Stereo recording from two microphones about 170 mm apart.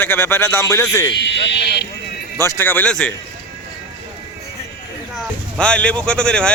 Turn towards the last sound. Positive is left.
turn(degrees=5)  # may be behind; listen again after turning